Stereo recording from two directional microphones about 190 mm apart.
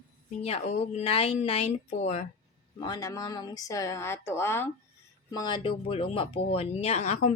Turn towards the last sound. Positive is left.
turn(degrees=35)  # may be behind; listen again after turning